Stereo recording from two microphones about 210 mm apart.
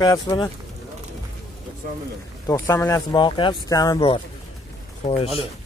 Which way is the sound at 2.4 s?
15° left (ahead or behind).